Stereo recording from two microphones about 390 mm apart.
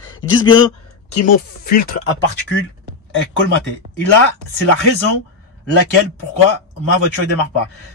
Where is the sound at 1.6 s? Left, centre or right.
Left.